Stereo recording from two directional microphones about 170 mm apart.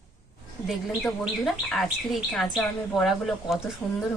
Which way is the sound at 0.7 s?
Centre (ahead or behind).